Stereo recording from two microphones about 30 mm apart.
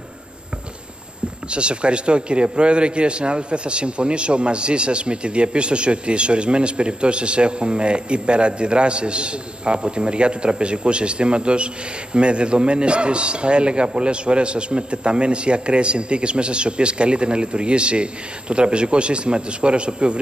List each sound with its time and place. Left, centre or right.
1.5 s a man's voice: right